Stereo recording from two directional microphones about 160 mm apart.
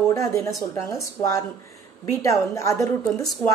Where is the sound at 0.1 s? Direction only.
20° left (ahead or behind).